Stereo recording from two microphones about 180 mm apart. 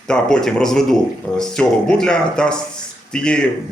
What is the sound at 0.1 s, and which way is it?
Speech, 5° left (ahead or behind).